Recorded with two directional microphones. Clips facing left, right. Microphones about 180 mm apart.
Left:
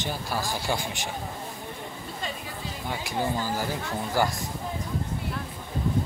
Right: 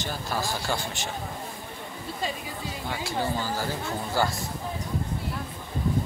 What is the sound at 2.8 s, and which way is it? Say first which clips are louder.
A man's voice: left 1 dB; 15° left (ahead or behind).